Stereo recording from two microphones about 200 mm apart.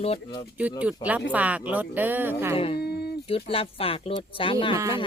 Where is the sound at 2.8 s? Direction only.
55° left (ahead or behind).